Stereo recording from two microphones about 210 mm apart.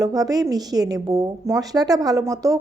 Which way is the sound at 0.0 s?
15° right (ahead or behind).